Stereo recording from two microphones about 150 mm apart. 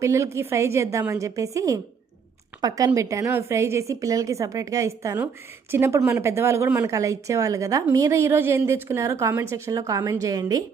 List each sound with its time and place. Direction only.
0.0 s speech: 20° right (ahead or behind)